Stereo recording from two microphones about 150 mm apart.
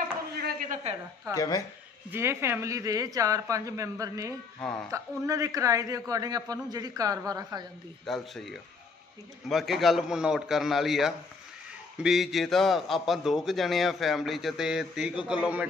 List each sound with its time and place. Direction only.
0.4 s a sound: 80° right
1.3 s speech: 25° left (ahead or behind)
2.0 s a man's voice: 15° right (ahead or behind)
4.6 s a man's voice: 5° left (ahead or behind)
4.9 s a man's voice: 20° right (ahead or behind)
8.0 s a man's voice: centre (ahead or behind)